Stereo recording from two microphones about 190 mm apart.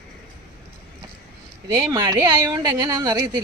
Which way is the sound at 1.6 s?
20° right (ahead or behind).